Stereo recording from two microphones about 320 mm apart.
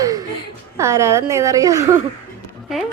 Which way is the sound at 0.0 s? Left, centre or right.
Centre.